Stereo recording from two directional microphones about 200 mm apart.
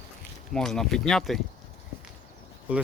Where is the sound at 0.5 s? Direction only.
Centre (ahead or behind).